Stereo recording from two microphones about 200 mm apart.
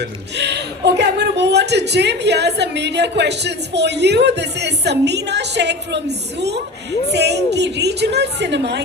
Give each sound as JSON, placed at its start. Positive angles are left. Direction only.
{"t": 0.0, "sound": "speech", "side_deg": -60}